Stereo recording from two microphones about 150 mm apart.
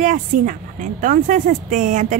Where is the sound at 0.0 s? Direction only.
60° right (ahead or behind).